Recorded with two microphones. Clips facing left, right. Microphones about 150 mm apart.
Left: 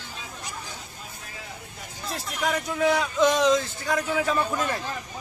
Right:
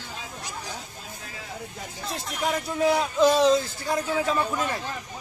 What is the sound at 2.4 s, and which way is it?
Speech, 30° right (ahead or behind).